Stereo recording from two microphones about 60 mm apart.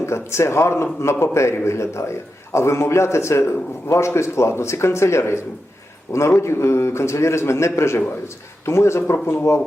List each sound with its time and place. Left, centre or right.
0.0 s a man's voice: left